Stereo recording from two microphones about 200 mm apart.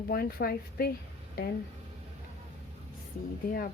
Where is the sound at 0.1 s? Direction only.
50° left (ahead or behind).